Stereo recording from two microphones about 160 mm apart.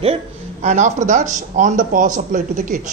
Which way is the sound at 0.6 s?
45° right (ahead or behind).